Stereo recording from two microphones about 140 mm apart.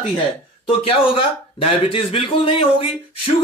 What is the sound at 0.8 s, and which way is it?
Speech, 45° left (ahead or behind).